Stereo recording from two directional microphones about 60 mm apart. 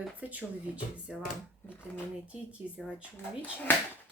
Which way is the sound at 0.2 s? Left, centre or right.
Right.